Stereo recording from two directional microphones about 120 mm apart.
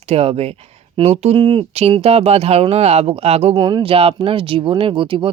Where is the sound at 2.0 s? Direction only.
60° right (ahead or behind).